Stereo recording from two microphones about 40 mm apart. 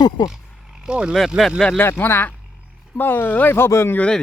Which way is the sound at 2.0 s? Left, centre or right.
Left.